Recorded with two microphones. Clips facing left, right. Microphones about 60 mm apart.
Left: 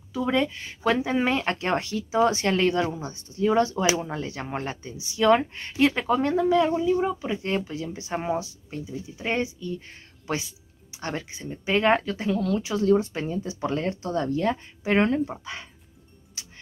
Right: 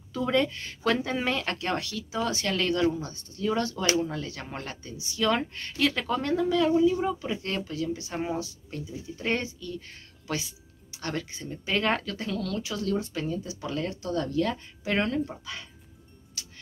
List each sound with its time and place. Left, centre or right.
0.1 s speech: centre
7.0 s speech: left
16.4 s music: left